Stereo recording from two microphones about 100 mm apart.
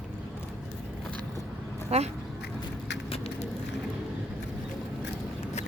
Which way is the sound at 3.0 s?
80° left.